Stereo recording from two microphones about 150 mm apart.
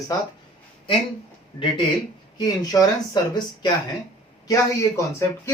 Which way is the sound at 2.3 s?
25° left (ahead or behind).